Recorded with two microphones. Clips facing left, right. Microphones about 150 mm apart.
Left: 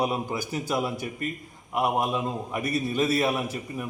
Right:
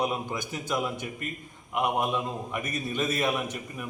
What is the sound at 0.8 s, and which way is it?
Speech, 35° left (ahead or behind).